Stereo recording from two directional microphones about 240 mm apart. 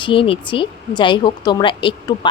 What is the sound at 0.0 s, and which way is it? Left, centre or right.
A woman's voice, left.